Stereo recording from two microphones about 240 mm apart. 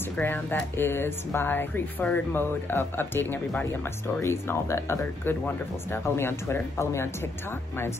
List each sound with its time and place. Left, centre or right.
0.0 s speech: centre